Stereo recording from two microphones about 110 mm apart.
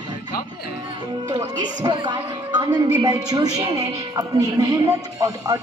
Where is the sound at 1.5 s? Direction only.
40° right (ahead or behind).